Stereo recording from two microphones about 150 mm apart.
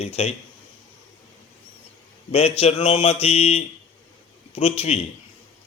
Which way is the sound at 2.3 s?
40° left (ahead or behind).